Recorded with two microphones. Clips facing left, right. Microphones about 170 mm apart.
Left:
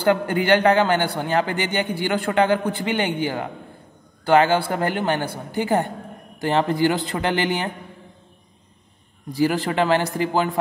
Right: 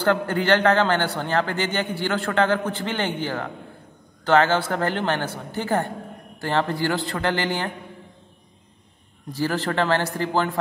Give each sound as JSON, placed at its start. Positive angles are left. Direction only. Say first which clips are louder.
{"t": 0.0, "sound": "a man's voice", "louder": "left 2 dB", "side_deg": 10}
{"t": 9.3, "sound": "a man's voice", "louder": "left 4 dB", "side_deg": 15}